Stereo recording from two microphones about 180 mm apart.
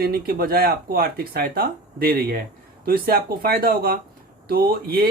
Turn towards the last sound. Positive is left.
turn(degrees=-55)  # may be behind; listen again after turning